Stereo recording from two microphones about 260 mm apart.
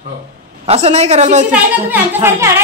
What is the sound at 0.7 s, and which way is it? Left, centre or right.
Speech, right.